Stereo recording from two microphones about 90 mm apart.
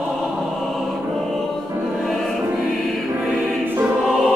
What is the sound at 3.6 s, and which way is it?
Music, 25° right (ahead or behind).